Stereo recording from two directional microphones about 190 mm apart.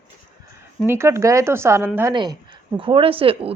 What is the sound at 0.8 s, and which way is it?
Speech, 15° right (ahead or behind).